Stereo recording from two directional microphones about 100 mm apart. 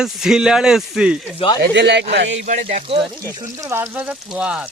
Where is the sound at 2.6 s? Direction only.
80° right.